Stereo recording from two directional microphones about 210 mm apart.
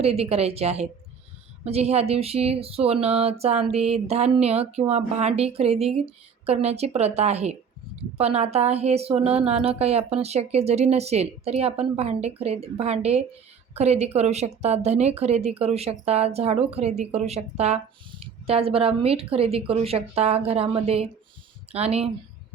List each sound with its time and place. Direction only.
0.0 s a woman's voice: 30° right (ahead or behind)